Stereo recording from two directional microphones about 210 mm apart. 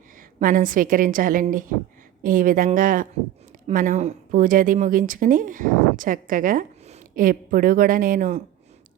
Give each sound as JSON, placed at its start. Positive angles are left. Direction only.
{"t": 0.2, "sound": "speech", "side_deg": -40}